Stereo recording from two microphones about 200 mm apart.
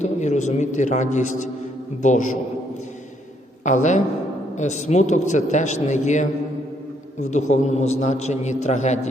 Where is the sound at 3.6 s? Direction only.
35° left (ahead or behind).